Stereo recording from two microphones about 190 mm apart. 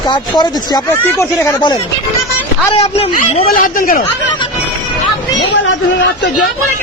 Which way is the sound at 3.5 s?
45° left (ahead or behind).